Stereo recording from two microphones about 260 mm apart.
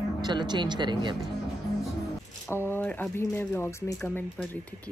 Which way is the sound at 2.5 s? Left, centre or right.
Centre.